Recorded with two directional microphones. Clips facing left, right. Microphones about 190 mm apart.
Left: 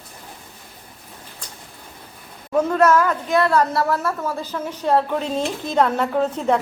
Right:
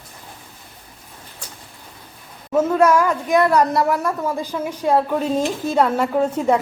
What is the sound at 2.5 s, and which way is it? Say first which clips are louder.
A woman's voice: right 1 dB; 10° right (ahead or behind).